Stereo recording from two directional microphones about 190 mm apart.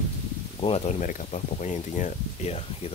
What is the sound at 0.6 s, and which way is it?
Speech, 35° left (ahead or behind).